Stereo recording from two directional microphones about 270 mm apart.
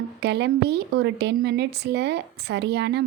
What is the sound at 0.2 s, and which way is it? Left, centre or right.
A woman's voice, right.